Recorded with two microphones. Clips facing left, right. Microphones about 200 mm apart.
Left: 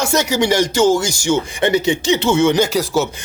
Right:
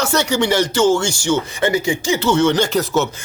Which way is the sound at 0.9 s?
35° left (ahead or behind).